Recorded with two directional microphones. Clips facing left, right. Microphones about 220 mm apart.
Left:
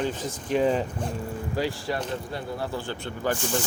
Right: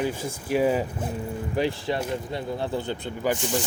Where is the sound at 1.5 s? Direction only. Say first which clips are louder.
Right 3 dB; 20° right (ahead or behind).